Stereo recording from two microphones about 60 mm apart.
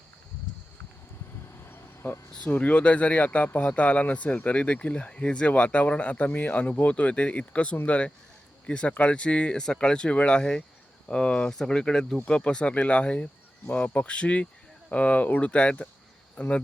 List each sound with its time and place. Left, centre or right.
1.6 s vehicle: left
2.5 s speech: left